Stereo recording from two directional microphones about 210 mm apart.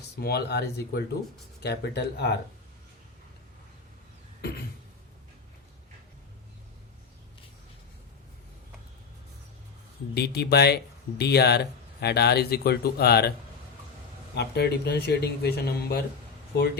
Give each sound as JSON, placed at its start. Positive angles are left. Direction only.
{"t": 0.2, "sound": "speech", "side_deg": 50}
{"t": 10.2, "sound": "speech", "side_deg": 50}
{"t": 14.3, "sound": "speech", "side_deg": 50}